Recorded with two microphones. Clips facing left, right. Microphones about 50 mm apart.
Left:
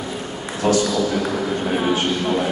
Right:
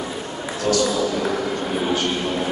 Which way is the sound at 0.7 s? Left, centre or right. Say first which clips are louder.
Left 3 dB; left.